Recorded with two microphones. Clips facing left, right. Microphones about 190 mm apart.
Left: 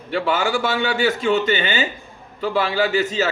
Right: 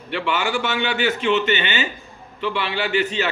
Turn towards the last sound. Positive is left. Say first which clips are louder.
# left 3 dB
turn(degrees=40)  # may be behind; listen again after turning